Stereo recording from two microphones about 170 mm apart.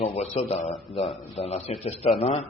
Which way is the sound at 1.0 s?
Centre (ahead or behind).